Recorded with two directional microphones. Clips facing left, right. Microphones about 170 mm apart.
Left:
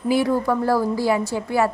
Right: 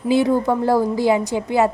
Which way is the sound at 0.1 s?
20° right (ahead or behind).